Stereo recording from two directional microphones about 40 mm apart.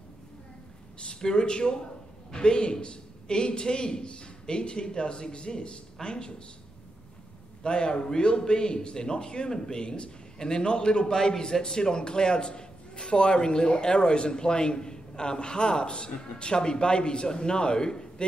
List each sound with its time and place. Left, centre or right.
0.9 s a man's voice: left
7.6 s a man's voice: left